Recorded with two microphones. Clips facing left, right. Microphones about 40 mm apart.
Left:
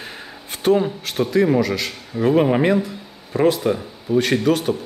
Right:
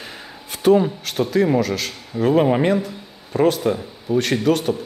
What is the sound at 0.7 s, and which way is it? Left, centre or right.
A man's voice, centre.